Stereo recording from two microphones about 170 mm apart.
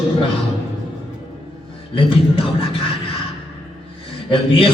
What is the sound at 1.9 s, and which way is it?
Speech, 30° left (ahead or behind).